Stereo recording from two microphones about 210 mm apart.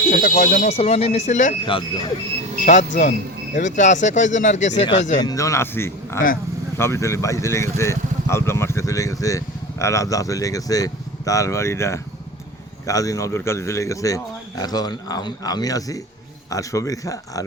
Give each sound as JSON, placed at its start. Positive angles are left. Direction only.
{"t": 0.1, "sound": "speech", "side_deg": 40}
{"t": 2.6, "sound": "speech", "side_deg": 35}
{"t": 5.2, "sound": "speech", "side_deg": 15}